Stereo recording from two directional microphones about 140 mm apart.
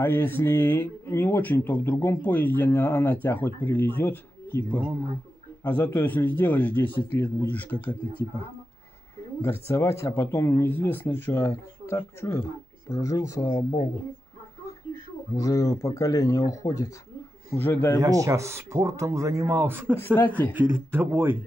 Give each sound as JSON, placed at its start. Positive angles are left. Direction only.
{"t": 0.0, "sound": "speech", "side_deg": 15}
{"t": 9.4, "sound": "speech", "side_deg": 20}
{"t": 15.3, "sound": "speech", "side_deg": 25}
{"t": 17.5, "sound": "speech", "side_deg": 15}
{"t": 18.0, "sound": "speech", "side_deg": -25}